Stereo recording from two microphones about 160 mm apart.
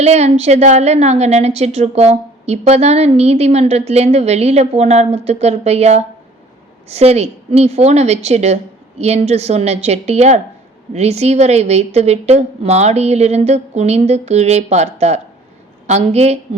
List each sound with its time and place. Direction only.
0.0 s a woman's voice: 45° right (ahead or behind)